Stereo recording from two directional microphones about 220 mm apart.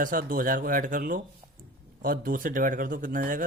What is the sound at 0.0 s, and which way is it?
Speech, 40° right (ahead or behind).